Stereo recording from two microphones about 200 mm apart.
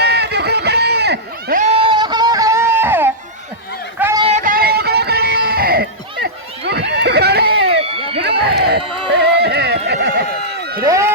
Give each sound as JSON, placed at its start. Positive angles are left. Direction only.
{"t": 0.0, "sound": "run", "side_deg": -55}
{"t": 1.9, "sound": "music", "side_deg": -20}
{"t": 4.2, "sound": "music", "side_deg": -35}
{"t": 7.8, "sound": "a sound", "side_deg": -30}
{"t": 8.2, "sound": "run", "side_deg": -55}
{"t": 10.8, "sound": "run", "side_deg": -15}